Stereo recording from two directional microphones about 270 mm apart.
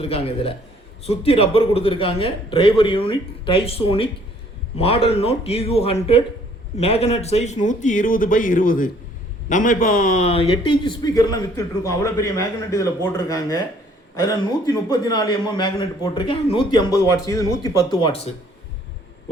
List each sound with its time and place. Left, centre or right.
0.0 s a man's voice: left
14.7 s a man's voice: centre